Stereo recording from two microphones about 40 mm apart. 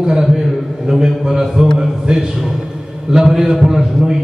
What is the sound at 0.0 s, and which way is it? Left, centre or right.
Speech, centre.